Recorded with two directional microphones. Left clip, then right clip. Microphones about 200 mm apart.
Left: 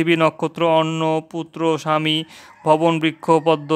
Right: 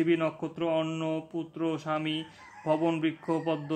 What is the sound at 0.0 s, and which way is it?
Speech, 50° left (ahead or behind).